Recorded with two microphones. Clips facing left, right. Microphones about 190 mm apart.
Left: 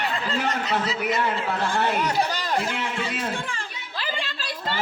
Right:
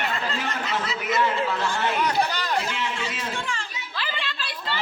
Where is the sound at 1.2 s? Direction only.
55° left (ahead or behind).